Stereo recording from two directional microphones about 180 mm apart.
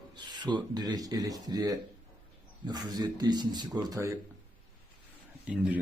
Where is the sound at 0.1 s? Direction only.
25° right (ahead or behind).